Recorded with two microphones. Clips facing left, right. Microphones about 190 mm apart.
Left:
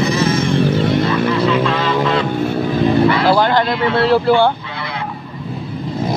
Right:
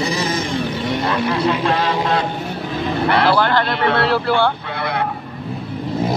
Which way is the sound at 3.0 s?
65° right (ahead or behind).